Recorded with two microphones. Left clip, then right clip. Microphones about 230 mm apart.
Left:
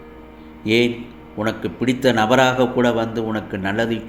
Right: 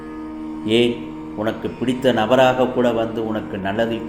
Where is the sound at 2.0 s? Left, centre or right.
Left.